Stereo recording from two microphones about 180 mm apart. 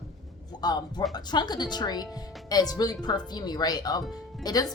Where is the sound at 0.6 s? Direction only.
25° left (ahead or behind).